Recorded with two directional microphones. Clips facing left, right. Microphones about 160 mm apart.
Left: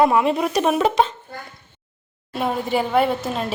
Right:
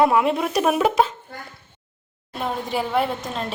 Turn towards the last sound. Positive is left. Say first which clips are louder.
# left 4 dB
turn(degrees=5)  # may be behind; listen again after turning